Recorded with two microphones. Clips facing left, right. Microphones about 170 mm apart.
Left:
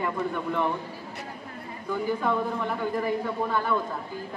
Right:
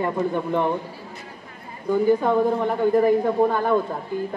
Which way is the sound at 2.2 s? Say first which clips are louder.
Right 7 dB; 40° right (ahead or behind).